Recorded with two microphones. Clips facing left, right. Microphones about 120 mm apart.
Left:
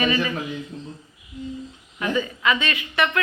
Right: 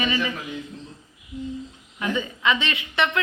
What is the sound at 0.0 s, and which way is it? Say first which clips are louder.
Speech: left 3 dB; 20° right (ahead or behind).